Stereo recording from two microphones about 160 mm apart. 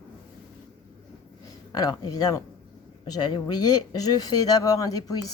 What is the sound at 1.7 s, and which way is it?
Speech, 25° left (ahead or behind).